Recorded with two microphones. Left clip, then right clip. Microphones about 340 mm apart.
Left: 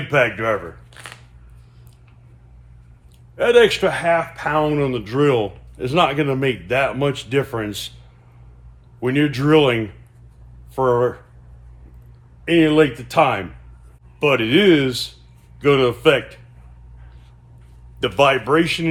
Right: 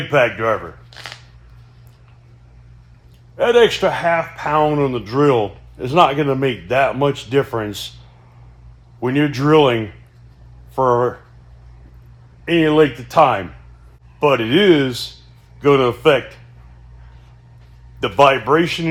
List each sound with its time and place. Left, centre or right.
0.1 s speech: centre
0.9 s scissors: centre
3.3 s speech: centre
9.0 s speech: centre
10.8 s speech: centre
12.5 s speech: centre
18.0 s speech: centre